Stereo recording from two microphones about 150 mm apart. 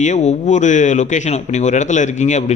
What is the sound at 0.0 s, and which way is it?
A man's voice, 50° left (ahead or behind).